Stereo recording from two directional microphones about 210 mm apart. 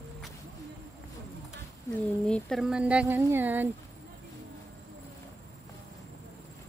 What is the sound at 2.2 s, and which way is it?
Speech, 5° left (ahead or behind).